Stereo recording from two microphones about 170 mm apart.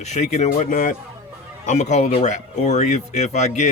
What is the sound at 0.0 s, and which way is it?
Speech, 40° left (ahead or behind).